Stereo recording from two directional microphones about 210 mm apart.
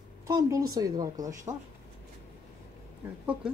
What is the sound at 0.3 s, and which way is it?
Speech, 15° right (ahead or behind).